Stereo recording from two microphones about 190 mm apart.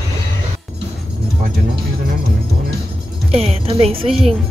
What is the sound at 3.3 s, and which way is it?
Speech, 30° right (ahead or behind).